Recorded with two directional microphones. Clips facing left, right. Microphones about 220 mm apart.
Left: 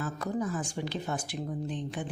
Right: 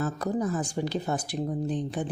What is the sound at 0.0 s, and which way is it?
Speech, 40° right (ahead or behind).